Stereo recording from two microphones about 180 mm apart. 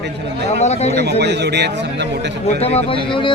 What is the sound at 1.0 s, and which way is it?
Speech, 65° right (ahead or behind).